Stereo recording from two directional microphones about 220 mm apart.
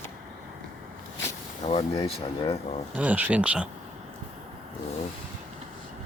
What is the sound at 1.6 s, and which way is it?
Speech, 30° left (ahead or behind).